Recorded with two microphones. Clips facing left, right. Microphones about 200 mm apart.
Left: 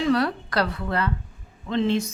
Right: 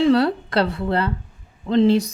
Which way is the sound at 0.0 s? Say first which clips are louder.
Right 6 dB; 30° right (ahead or behind).